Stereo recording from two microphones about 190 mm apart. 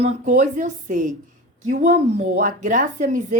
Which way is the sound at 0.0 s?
40° right (ahead or behind).